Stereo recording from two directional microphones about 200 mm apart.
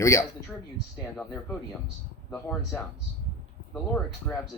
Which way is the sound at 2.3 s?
5° left (ahead or behind).